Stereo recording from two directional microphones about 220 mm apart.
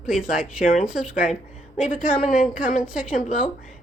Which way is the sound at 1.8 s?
35° left (ahead or behind).